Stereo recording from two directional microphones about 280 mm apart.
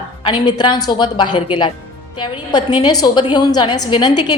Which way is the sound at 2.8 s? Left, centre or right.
Centre.